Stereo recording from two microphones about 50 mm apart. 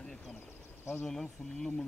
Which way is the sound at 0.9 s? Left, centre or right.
Centre.